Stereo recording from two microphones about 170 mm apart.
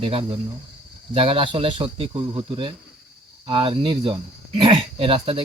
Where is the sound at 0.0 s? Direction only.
30° right (ahead or behind).